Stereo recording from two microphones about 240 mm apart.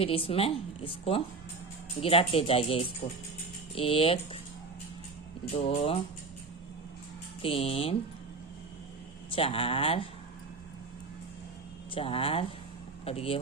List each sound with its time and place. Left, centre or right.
0.0 s speech: left
5.5 s speech: left
7.4 s speech: left
9.3 s speech: left
11.9 s speech: left